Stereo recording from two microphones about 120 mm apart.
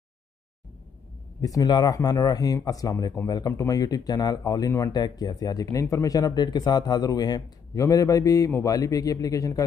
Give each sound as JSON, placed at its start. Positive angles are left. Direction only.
{"t": 1.4, "sound": "speech", "side_deg": 30}